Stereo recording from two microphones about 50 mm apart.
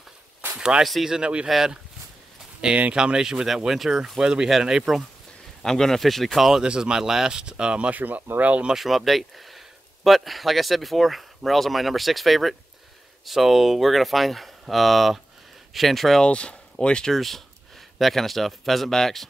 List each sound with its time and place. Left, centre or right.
0.6 s a sound: centre
1.0 s speech: centre
2.9 s speech: centre
5.6 s speech: centre
6.6 s speech: centre
7.9 s speech: right
8.7 s speech: centre
16.3 s speech: left
17.1 s speech: centre